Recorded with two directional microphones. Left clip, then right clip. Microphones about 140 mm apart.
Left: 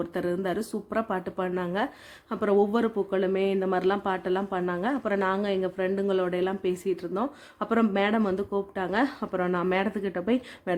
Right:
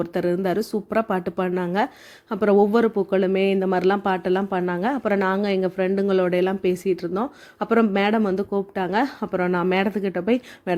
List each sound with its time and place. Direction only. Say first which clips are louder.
0.0 s speech: right 6 dB; 30° right (ahead or behind)